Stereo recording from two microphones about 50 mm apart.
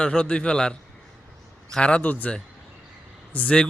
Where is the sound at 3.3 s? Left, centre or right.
Left.